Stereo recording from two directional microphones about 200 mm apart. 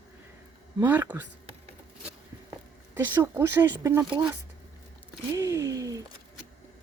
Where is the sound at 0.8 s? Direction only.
10° right (ahead or behind).